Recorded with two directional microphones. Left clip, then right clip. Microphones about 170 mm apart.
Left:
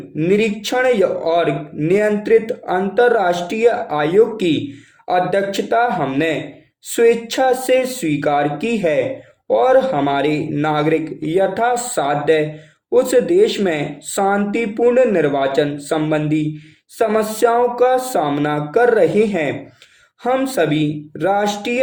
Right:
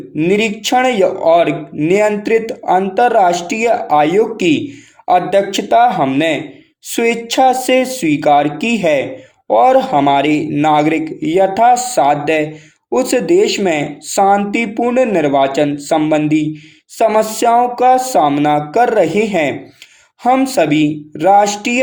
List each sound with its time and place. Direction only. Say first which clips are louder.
0.2 s speech: right 2 dB; 30° right (ahead or behind)